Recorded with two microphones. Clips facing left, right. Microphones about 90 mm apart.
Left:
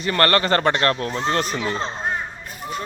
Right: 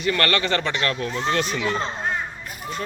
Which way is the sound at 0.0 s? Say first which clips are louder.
Left 3 dB; 35° left (ahead or behind).